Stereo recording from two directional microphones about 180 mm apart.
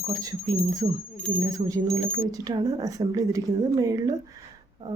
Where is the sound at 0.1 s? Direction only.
20° right (ahead or behind).